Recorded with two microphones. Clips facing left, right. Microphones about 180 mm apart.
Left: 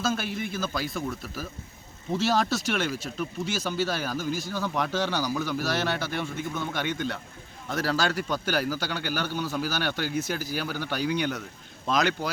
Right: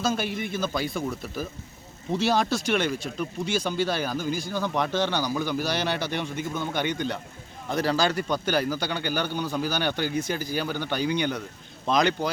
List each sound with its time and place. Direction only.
0.0 s a man's voice: centre (ahead or behind)